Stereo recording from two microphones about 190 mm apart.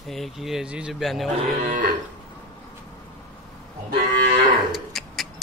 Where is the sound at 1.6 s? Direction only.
45° right (ahead or behind).